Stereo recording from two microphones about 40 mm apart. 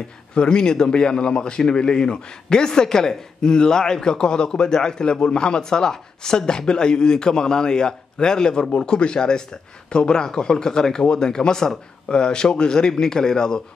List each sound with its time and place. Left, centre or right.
0.3 s a man's voice: left